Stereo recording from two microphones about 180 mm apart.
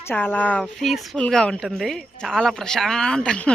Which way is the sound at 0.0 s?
10° left (ahead or behind).